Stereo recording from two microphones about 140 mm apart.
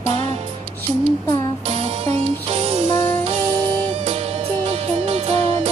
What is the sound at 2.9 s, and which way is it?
Music, 30° left (ahead or behind).